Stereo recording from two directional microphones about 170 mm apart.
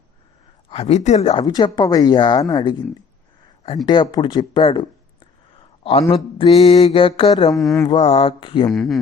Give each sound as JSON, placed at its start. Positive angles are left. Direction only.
{"t": 0.7, "sound": "speech", "side_deg": 40}
{"t": 3.8, "sound": "speech", "side_deg": 30}
{"t": 7.5, "sound": "speech", "side_deg": 0}
{"t": 7.8, "sound": "speech", "side_deg": 30}
{"t": 8.7, "sound": "speech", "side_deg": 0}